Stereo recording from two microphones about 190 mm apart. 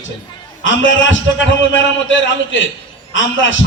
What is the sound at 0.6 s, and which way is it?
Speech, 80° left.